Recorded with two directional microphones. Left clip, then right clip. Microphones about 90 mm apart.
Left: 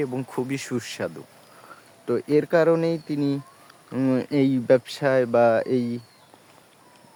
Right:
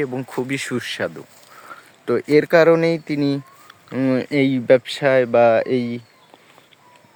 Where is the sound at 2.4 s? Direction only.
30° right (ahead or behind).